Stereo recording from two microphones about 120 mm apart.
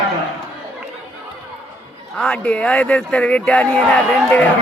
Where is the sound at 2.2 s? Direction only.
10° left (ahead or behind).